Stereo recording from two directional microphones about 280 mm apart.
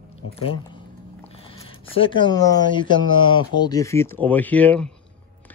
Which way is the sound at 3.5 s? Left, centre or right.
Centre.